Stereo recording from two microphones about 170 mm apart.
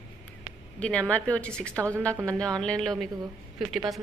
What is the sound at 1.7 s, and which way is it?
Speech, 15° right (ahead or behind).